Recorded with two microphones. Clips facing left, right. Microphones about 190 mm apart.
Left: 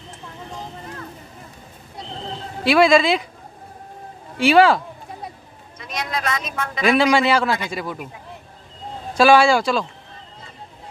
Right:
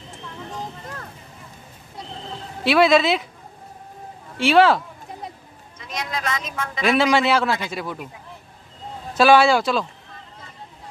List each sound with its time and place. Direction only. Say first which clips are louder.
2.6 s a man's voice: left 1 dB; centre (ahead or behind)
4.4 s a man's voice: left 1 dB; centre (ahead or behind)
5.9 s speech: left 2 dB; 65° left (ahead or behind)
6.8 s a man's voice: left 2 dB; centre (ahead or behind)
9.1 s a man's voice: left 1 dB; centre (ahead or behind)